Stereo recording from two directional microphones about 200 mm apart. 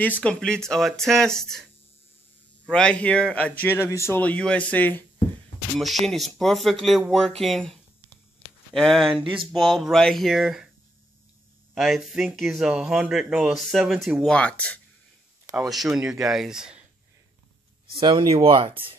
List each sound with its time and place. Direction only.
0.0 s speech: 5° left (ahead or behind)
2.7 s speech: 5° left (ahead or behind)
11.7 s speech: centre (ahead or behind)
17.9 s speech: 25° right (ahead or behind)